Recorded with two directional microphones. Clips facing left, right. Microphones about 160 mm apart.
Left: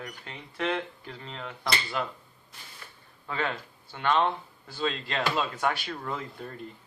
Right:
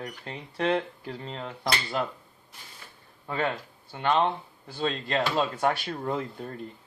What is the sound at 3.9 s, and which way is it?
Speech, 20° right (ahead or behind).